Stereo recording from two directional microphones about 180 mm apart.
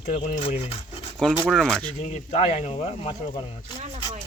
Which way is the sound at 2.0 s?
40° left (ahead or behind).